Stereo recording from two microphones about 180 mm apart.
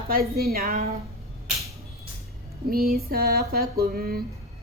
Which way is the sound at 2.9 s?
55° right (ahead or behind).